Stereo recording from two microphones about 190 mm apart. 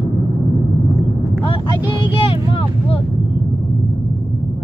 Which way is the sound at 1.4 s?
25° left (ahead or behind).